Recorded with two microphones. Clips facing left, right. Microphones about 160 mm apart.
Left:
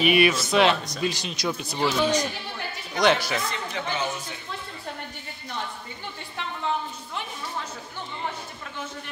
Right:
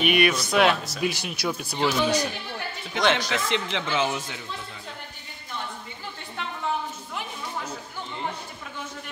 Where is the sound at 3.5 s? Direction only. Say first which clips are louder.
Right 3 dB; 90° right.